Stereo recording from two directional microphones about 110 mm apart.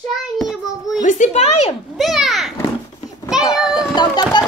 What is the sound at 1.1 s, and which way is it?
Speech, 90° left.